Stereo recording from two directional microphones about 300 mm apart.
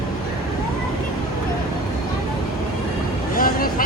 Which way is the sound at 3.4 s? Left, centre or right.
Left.